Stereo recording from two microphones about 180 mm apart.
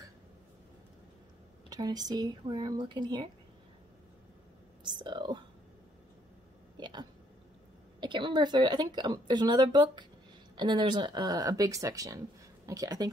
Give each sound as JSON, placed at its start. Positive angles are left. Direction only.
{"t": 1.7, "sound": "a woman's voice", "side_deg": -20}
{"t": 4.8, "sound": "whispering", "side_deg": -25}
{"t": 6.8, "sound": "a sound", "side_deg": -25}
{"t": 8.0, "sound": "a woman's voice", "side_deg": -25}